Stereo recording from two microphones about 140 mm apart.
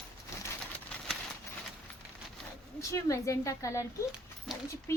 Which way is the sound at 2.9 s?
20° left (ahead or behind).